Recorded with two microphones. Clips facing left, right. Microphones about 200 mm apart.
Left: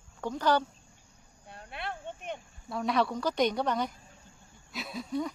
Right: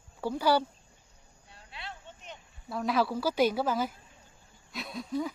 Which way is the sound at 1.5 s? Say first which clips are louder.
Left 7 dB; 55° left (ahead or behind).